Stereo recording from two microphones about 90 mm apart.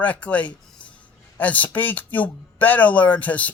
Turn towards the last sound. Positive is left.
turn(degrees=20)  # may be behind; listen again after turning